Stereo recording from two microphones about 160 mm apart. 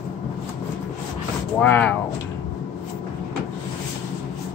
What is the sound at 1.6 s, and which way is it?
Speech, 10° left (ahead or behind).